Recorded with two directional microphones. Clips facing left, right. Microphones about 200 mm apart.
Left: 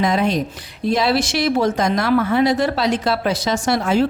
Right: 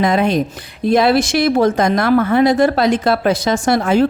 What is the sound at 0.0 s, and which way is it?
Speech, 55° right (ahead or behind).